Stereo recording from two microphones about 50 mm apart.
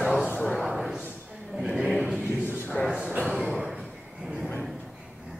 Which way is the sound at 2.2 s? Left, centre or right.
Right.